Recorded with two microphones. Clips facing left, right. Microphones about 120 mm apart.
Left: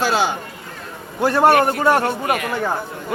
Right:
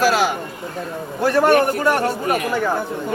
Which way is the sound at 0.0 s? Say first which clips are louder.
Right 2 dB; 25° left (ahead or behind).